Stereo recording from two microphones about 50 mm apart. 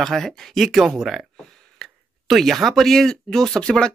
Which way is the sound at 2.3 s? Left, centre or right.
Centre.